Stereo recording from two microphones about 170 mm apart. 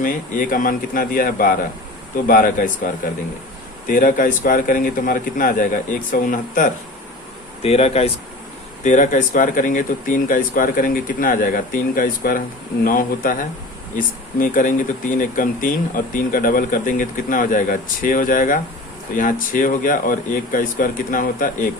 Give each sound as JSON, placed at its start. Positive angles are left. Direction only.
{"t": 0.0, "sound": "speech", "side_deg": 55}
{"t": 7.6, "sound": "speech", "side_deg": 35}